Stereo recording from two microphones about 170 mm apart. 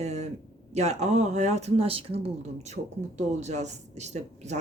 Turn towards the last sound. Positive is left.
turn(degrees=-40)  # may be behind; listen again after turning